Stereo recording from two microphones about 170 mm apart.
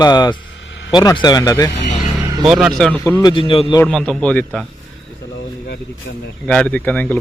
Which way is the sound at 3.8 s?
5° left (ahead or behind).